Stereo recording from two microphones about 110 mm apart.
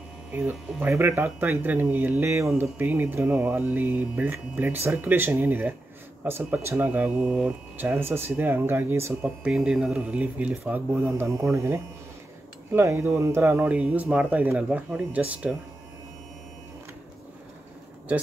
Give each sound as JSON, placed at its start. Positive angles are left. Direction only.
{"t": 0.3, "sound": "speech", "side_deg": -15}
{"t": 7.7, "sound": "speech", "side_deg": -20}
{"t": 9.4, "sound": "speech", "side_deg": -5}